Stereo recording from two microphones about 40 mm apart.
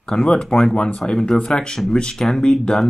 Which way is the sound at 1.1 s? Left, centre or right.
Centre.